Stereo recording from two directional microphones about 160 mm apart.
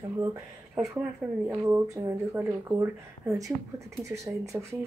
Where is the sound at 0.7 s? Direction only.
5° right (ahead or behind).